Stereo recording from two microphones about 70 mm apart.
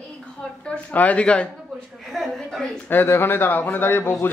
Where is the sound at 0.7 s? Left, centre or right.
Centre.